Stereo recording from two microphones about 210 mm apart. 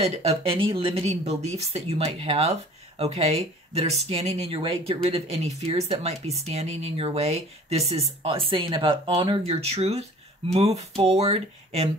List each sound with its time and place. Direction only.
0.0 s speech: 25° right (ahead or behind)